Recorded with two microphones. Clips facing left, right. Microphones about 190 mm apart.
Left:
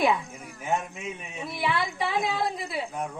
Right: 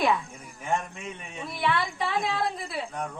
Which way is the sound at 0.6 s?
5° left (ahead or behind).